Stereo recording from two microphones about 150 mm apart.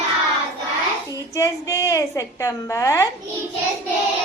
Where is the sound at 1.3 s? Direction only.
20° left (ahead or behind).